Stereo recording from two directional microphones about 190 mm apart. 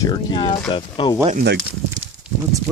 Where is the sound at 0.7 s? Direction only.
25° left (ahead or behind).